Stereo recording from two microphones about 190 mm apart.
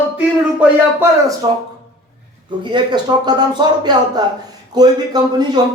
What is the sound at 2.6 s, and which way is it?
A man's voice, 25° right (ahead or behind).